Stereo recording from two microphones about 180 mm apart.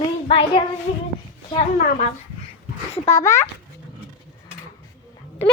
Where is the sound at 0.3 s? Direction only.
30° left (ahead or behind).